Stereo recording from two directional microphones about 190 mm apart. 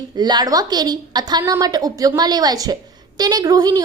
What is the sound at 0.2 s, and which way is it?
A woman's voice, 20° right (ahead or behind).